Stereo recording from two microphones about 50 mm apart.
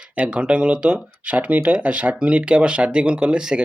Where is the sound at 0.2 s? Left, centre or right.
Right.